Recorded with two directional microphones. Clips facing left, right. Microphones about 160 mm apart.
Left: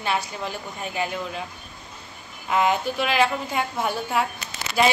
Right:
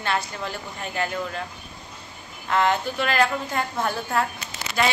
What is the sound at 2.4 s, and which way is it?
A woman's voice, 10° left (ahead or behind).